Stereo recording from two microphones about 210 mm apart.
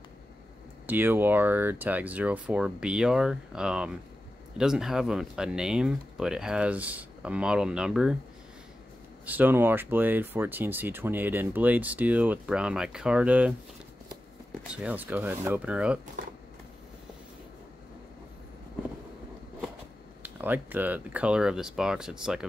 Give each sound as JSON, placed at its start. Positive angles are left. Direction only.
{"t": 0.8, "sound": "speech", "side_deg": -10}
{"t": 9.2, "sound": "speech", "side_deg": -10}
{"t": 14.7, "sound": "speech", "side_deg": -5}
{"t": 20.2, "sound": "speech", "side_deg": -10}